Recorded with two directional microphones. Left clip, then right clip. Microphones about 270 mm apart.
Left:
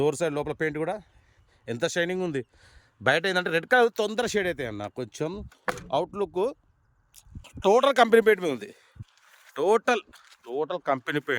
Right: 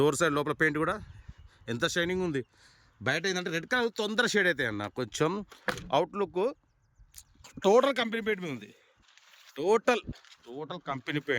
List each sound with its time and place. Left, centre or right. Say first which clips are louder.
0.0 s speech: even; centre